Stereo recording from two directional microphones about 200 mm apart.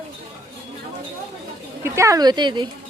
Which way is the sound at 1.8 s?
15° right (ahead or behind).